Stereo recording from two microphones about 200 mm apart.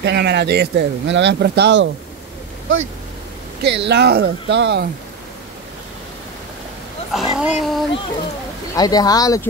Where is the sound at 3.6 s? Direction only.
55° right (ahead or behind).